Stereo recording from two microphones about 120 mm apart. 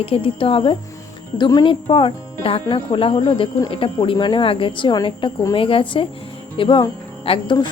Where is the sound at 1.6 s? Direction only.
45° left (ahead or behind).